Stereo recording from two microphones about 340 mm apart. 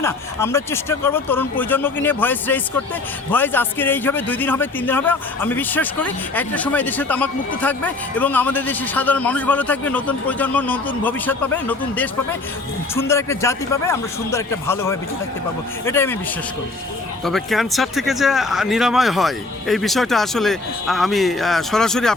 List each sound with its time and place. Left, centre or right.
0.0 s a man's voice: centre
17.2 s a man's voice: centre